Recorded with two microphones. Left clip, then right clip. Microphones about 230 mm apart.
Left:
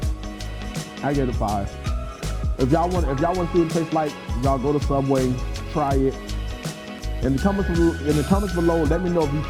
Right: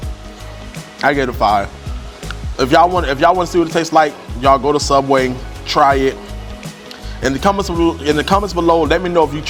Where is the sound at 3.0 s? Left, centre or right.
Centre.